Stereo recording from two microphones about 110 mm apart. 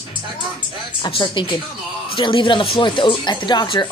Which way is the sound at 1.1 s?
45° left (ahead or behind).